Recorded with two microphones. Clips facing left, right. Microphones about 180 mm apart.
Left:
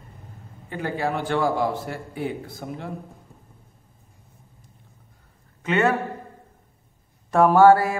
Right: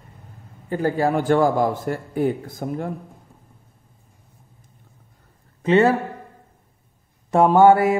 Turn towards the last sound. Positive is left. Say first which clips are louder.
# right 1 dB
turn(degrees=-20)  # may be behind; listen again after turning